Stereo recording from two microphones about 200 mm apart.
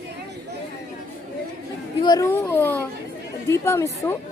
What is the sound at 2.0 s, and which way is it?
Speech, 20° left (ahead or behind).